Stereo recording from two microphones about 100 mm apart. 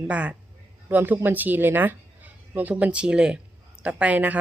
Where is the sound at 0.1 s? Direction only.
15° right (ahead or behind).